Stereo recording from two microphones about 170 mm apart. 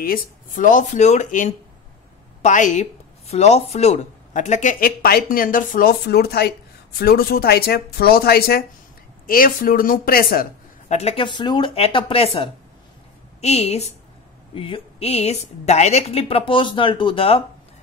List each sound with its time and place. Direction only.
0.0 s speech: 55° left (ahead or behind)
10.9 s a woman's voice: 40° left (ahead or behind)